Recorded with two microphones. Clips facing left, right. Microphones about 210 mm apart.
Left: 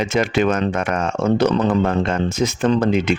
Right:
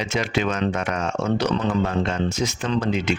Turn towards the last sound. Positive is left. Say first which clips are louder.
# left 6 dB
turn(degrees=55)  # may be behind; listen again after turning